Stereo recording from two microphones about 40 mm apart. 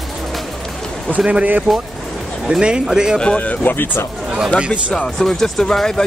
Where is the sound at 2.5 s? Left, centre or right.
Right.